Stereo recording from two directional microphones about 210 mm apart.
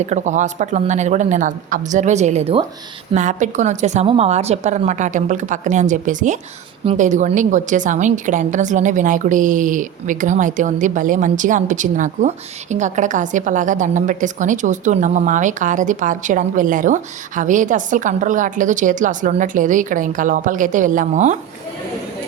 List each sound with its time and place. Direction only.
0.0 s a woman's voice: 35° right (ahead or behind)